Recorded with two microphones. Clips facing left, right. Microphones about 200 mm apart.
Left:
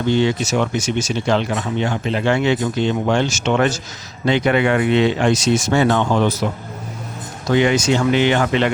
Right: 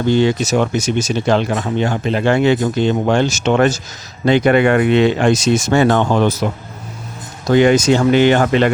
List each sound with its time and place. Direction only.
0.1 s speech: 40° right (ahead or behind)
7.5 s speech: 45° right (ahead or behind)